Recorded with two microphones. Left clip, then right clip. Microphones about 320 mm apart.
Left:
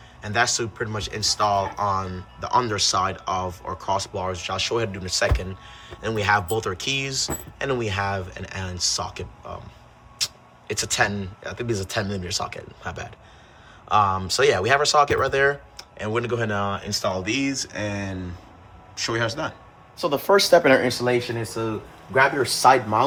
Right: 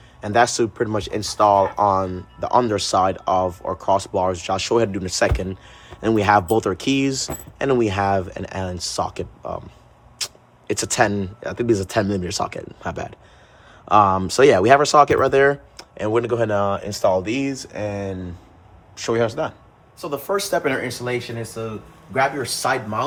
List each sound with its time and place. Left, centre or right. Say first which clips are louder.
0.2 s speech: right 5 dB; centre
20.0 s speech: left 5 dB; left
22.4 s speech: left 5 dB; centre